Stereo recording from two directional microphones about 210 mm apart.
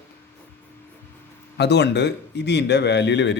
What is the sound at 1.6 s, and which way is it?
Speech, 55° left (ahead or behind).